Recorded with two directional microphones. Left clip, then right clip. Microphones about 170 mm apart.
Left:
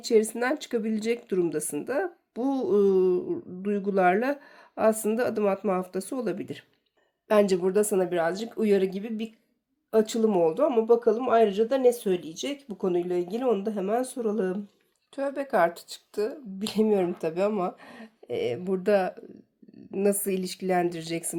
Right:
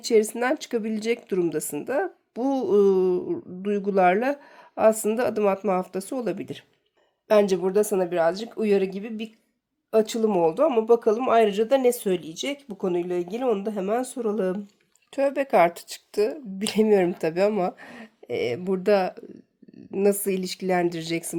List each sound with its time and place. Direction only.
0.0 s speech: 25° right (ahead or behind)